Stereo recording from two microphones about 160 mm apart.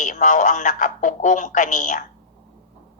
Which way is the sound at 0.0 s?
50° left (ahead or behind).